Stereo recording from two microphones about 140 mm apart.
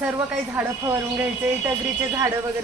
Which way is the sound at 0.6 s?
10° right (ahead or behind).